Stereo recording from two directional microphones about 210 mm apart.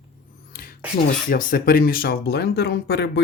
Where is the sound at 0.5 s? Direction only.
45° left (ahead or behind).